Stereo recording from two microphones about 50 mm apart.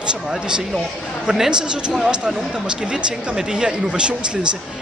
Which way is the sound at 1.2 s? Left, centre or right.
Centre.